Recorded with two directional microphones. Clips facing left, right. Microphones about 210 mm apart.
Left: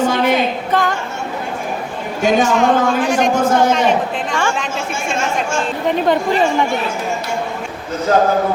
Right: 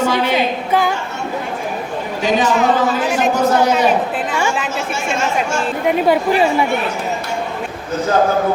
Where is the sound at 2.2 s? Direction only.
45° left (ahead or behind).